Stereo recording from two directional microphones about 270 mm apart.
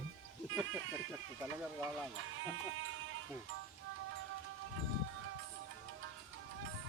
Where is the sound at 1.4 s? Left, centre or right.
Centre.